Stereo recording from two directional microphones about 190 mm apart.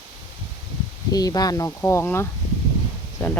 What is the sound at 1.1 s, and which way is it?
Speech, 20° left (ahead or behind).